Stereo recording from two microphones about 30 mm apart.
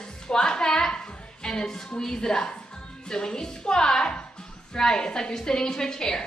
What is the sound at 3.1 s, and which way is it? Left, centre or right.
A woman's voice, left.